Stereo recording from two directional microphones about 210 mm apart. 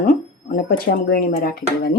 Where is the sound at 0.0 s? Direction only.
40° left (ahead or behind).